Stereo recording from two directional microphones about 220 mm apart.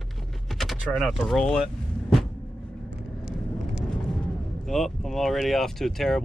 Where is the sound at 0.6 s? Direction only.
Centre (ahead or behind).